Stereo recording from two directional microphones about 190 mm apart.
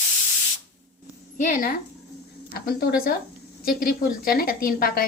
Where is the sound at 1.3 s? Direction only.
45° left (ahead or behind).